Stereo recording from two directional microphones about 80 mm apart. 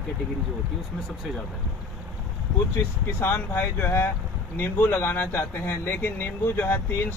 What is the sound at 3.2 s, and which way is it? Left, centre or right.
Speech, left.